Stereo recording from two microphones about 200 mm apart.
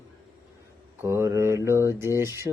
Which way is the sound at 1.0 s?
15° right (ahead or behind).